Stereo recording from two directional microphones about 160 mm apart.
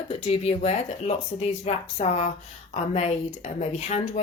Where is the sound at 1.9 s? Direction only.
45° left (ahead or behind).